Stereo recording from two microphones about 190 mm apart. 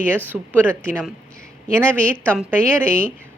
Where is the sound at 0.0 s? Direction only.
5° left (ahead or behind).